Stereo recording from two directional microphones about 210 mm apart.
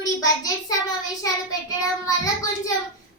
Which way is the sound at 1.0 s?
15° left (ahead or behind).